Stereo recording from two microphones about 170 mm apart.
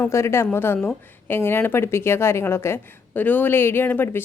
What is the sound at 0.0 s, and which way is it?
A woman's voice, 15° left (ahead or behind).